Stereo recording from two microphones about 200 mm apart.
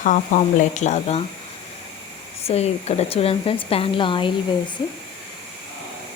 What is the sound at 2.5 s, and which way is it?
A woman's voice, 30° left (ahead or behind).